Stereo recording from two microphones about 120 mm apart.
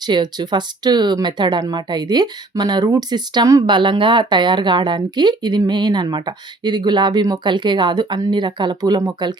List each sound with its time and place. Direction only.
0.1 s speech: 40° right (ahead or behind)
3.7 s speech: 45° right (ahead or behind)